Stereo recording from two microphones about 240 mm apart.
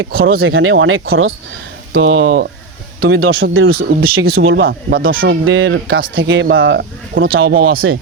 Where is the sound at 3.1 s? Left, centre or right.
Right.